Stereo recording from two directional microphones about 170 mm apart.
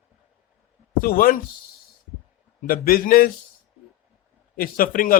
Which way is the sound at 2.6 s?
60° left (ahead or behind).